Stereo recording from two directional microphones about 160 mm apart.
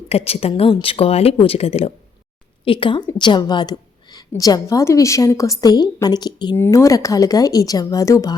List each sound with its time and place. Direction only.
0.1 s a woman's voice: 40° left (ahead or behind); by 8.4 s 20° left (ahead or behind)